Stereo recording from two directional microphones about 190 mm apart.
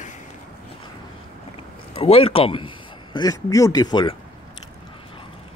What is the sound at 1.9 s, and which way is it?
A man's voice, 30° left (ahead or behind).